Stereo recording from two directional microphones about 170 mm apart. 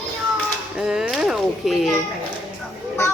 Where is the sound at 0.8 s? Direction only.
5° right (ahead or behind).